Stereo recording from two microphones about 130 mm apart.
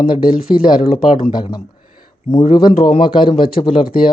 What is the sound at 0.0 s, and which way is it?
Speech, 40° left (ahead or behind).